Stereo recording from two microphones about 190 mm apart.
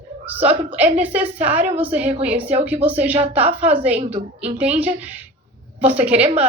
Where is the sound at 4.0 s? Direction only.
30° right (ahead or behind).